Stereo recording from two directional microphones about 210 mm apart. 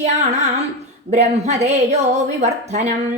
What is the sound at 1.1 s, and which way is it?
A woman's voice, 30° right (ahead or behind).